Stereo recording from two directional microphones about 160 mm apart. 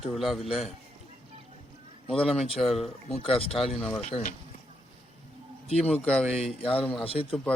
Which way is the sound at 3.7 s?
5° left (ahead or behind).